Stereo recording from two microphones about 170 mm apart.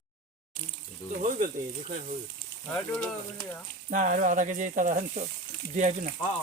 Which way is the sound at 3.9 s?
50° right (ahead or behind).